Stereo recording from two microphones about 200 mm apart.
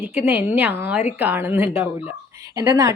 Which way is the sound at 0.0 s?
10° right (ahead or behind).